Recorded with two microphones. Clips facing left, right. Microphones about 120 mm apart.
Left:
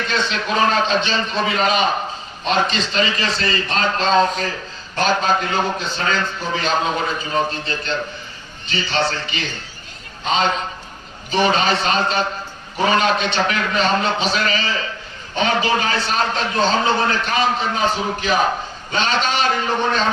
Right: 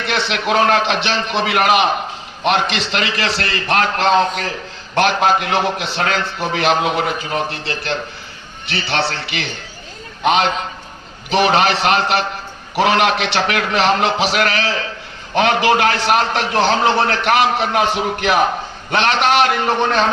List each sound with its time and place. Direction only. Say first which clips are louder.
0.0 s a man's voice: right 2 dB; 75° right (ahead or behind)